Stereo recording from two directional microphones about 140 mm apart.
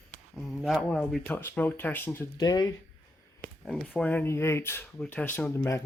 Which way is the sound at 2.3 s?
25° left (ahead or behind).